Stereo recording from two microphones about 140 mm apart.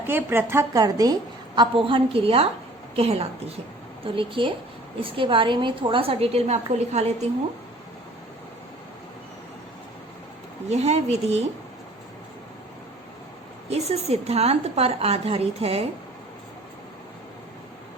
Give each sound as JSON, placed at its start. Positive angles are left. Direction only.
{"t": 0.1, "sound": "a woman's voice", "side_deg": -15}
{"t": 1.5, "sound": "a woman's voice", "side_deg": -40}
{"t": 10.7, "sound": "a woman's voice", "side_deg": -50}
{"t": 13.7, "sound": "a woman's voice", "side_deg": -50}